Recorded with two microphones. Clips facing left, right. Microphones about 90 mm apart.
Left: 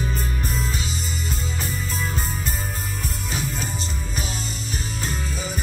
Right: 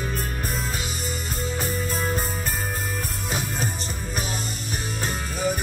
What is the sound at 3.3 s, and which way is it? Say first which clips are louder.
Music: right 1 dB; 50° right (ahead or behind).